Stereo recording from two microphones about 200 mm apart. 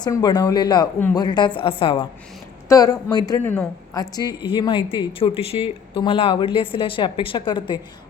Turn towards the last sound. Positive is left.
turn(degrees=25)  # may be behind; listen again after turning